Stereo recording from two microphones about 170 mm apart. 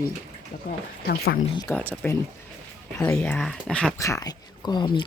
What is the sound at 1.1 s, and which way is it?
Speech, 65° left (ahead or behind).